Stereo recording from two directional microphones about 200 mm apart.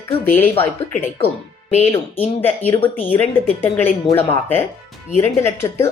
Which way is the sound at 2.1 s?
10° left (ahead or behind).